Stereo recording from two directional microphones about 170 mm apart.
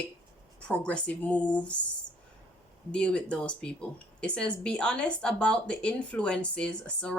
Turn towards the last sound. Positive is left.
turn(degrees=5)  # may be behind; listen again after turning